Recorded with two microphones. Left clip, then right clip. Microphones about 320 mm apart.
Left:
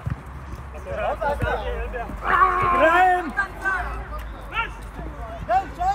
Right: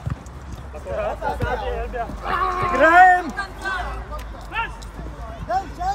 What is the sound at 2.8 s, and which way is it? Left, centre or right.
Speech, right.